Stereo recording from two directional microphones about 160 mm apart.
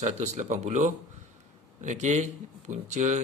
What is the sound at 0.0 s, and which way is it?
Speech, 50° right (ahead or behind).